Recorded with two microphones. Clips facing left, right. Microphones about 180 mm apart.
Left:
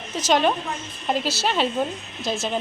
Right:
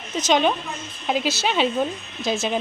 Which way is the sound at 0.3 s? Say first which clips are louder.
Even; 5° left (ahead or behind).